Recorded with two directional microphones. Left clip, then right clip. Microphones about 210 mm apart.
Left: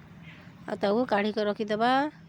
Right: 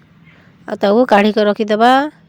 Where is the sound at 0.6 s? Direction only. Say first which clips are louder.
Right 14 dB; 30° right (ahead or behind).